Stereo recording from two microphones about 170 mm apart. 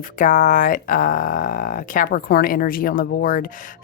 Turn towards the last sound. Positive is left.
turn(degrees=50)  # may be behind; listen again after turning